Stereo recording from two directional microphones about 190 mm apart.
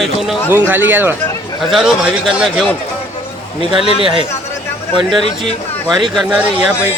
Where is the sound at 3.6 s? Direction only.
25° right (ahead or behind).